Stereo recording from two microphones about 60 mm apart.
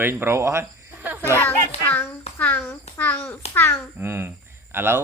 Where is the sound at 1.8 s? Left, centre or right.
Left.